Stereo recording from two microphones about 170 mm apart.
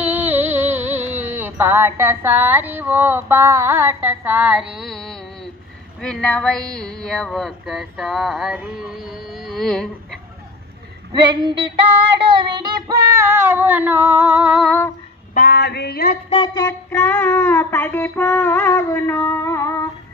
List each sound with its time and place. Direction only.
0.0 s music: 10° right (ahead or behind)
5.9 s a sound: 5° left (ahead or behind)
11.1 s female singing: 25° right (ahead or behind); by 14.8 s centre (ahead or behind)
15.3 s female singing: 60° left (ahead or behind)
16.3 s speech: 30° left (ahead or behind)
16.5 s music: 15° left (ahead or behind)